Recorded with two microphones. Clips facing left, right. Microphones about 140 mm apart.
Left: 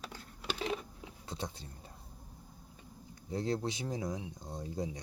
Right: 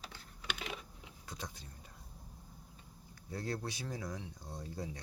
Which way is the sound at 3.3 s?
20° left (ahead or behind).